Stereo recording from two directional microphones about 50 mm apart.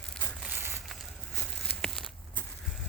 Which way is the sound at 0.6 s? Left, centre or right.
Right.